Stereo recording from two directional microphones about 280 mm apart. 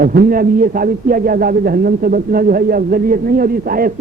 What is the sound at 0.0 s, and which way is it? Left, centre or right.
A man's voice, right.